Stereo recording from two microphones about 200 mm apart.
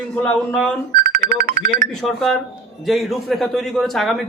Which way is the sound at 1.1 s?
50° right (ahead or behind).